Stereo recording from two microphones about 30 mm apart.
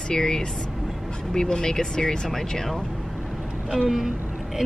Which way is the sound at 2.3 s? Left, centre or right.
Centre.